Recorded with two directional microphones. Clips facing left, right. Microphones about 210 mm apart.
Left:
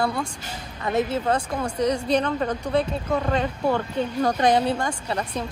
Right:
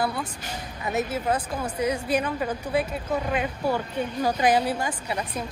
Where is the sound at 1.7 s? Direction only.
5° right (ahead or behind).